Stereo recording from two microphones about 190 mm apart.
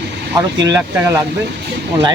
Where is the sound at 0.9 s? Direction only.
10° right (ahead or behind).